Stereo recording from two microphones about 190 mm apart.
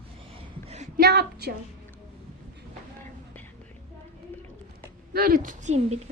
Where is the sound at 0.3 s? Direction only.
35° right (ahead or behind).